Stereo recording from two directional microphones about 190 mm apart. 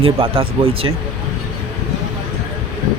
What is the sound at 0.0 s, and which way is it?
Speech, 30° right (ahead or behind).